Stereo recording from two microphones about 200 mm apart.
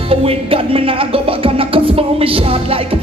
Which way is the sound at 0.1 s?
30° right (ahead or behind).